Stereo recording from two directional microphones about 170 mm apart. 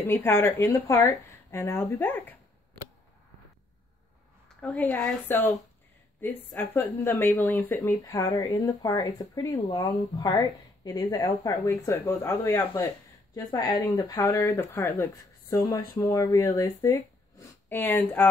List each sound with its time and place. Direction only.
0.0 s speech: 15° left (ahead or behind)
4.6 s speech: 10° left (ahead or behind)
13.3 s speech: 20° left (ahead or behind)